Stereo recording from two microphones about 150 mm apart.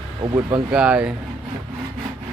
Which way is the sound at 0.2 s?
30° right (ahead or behind).